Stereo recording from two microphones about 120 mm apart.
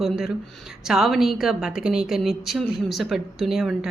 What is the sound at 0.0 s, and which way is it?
A woman's voice, centre (ahead or behind).